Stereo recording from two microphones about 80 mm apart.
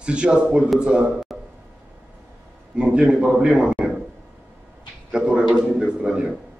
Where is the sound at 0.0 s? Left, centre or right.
Centre.